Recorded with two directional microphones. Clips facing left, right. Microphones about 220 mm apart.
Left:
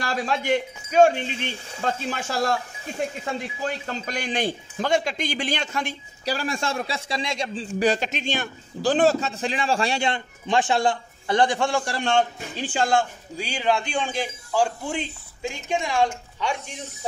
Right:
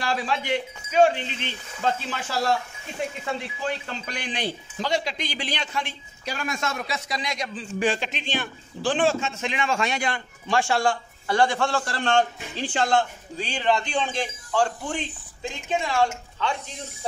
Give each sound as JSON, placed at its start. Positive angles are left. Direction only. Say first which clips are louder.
{"t": 0.0, "sound": "a man's voice", "louder": "left 1 dB", "side_deg": 45}
{"t": 3.8, "sound": "a man's voice", "louder": "left 4 dB", "side_deg": 40}
{"t": 7.9, "sound": "a man's voice", "louder": "left 3 dB", "side_deg": 45}